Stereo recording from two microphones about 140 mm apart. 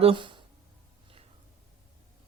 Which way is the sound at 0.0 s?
40° right (ahead or behind).